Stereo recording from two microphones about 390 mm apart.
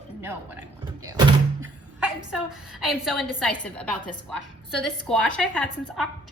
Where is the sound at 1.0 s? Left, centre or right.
Centre.